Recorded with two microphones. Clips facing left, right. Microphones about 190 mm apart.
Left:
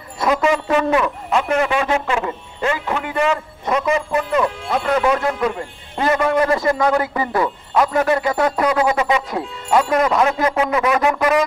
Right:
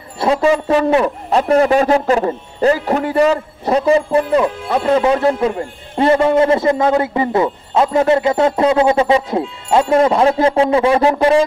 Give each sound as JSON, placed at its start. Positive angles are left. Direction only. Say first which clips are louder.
{"t": 0.2, "sound": "a man's voice", "louder": "right 4 dB", "side_deg": -30}